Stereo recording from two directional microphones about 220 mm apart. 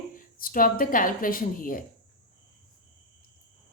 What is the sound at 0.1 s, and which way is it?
Speech, 40° left (ahead or behind).